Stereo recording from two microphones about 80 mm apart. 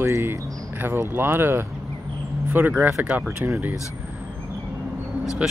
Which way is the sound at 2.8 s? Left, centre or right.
Right.